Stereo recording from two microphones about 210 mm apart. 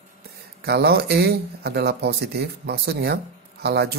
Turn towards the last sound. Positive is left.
turn(degrees=-50)  # may be behind; listen again after turning